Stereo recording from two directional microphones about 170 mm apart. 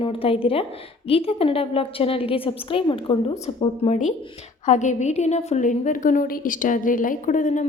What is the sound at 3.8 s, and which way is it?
A woman's voice, 45° left (ahead or behind).